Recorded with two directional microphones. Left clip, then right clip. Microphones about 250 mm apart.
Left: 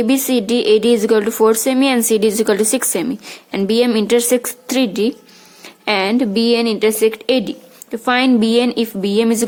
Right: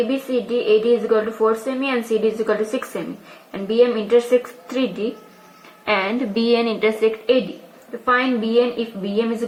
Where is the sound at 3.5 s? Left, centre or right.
Left.